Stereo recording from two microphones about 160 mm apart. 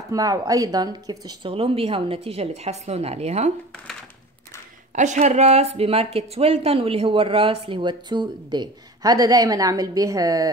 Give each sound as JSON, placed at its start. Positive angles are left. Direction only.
{"t": 0.1, "sound": "speech", "side_deg": -20}
{"t": 1.5, "sound": "a woman's voice", "side_deg": -35}
{"t": 4.9, "sound": "a woman's voice", "side_deg": -50}